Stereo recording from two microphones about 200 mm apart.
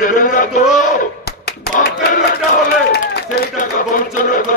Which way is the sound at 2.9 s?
45° left (ahead or behind).